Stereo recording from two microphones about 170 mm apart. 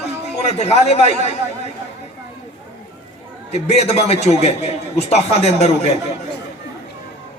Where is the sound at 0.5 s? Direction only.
40° left (ahead or behind).